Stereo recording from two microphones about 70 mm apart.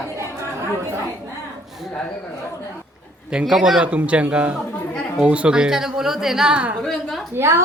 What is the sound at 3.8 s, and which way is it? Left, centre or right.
A woman's voice, centre.